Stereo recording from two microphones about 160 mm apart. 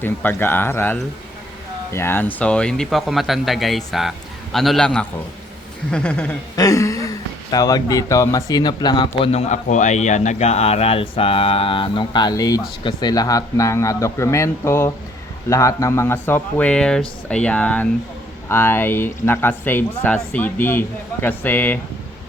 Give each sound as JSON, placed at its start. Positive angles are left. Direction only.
{"t": 0.0, "sound": "speech", "side_deg": 10}
{"t": 6.6, "sound": "a man's voice", "side_deg": 20}
{"t": 9.3, "sound": "a man's voice", "side_deg": 45}